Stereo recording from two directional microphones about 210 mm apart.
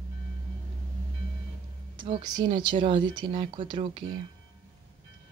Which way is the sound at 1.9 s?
25° right (ahead or behind).